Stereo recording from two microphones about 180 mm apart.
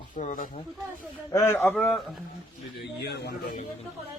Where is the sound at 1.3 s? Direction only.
15° left (ahead or behind); by 2.2 s centre (ahead or behind).